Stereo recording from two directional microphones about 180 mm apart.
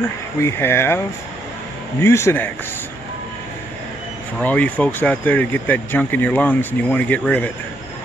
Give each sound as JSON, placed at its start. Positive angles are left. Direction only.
{"t": 0.4, "sound": "speech", "side_deg": 15}
{"t": 4.4, "sound": "speech", "side_deg": 10}